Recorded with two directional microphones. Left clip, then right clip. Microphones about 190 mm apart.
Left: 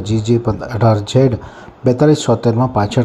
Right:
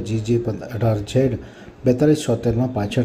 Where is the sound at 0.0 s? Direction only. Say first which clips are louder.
Left 6 dB; 10° left (ahead or behind).